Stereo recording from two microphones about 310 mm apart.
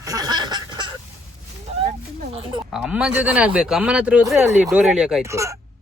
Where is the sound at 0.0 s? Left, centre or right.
Centre.